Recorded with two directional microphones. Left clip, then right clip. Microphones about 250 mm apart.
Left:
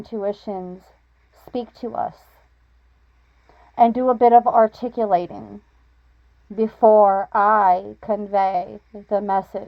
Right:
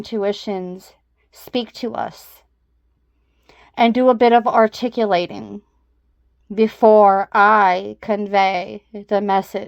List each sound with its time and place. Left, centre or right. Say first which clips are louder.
0.1 s a woman's voice: right 4 dB; right
3.4 s a woman's voice: even; right